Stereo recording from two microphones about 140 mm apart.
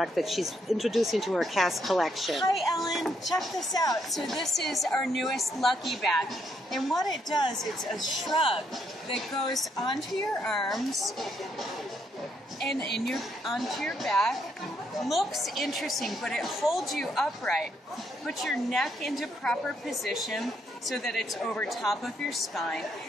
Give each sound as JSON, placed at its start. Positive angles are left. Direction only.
{"t": 0.0, "sound": "a woman's voice", "side_deg": 0}
{"t": 3.7, "sound": "a woman's voice", "side_deg": 25}
{"t": 4.1, "sound": "a woman's voice", "side_deg": 0}
{"t": 7.2, "sound": "a woman's voice", "side_deg": 30}
{"t": 7.8, "sound": "a woman's voice", "side_deg": 0}
{"t": 8.4, "sound": "a woman's voice", "side_deg": 40}
{"t": 9.1, "sound": "a woman's voice", "side_deg": 0}
{"t": 12.5, "sound": "a woman's voice", "side_deg": 0}